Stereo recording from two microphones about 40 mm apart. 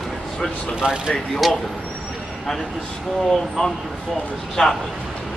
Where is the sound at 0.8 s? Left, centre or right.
Centre.